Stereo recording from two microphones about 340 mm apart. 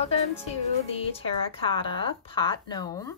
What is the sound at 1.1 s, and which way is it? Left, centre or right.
A woman's voice, centre.